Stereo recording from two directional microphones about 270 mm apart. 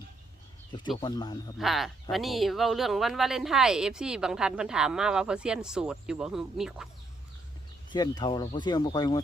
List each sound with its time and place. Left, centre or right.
0.7 s speech: centre
1.5 s speech: centre
7.9 s speech: centre